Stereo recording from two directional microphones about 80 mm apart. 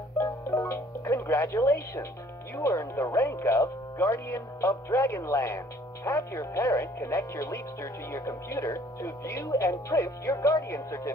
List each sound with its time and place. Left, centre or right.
0.2 s music: left
2.5 s speech: left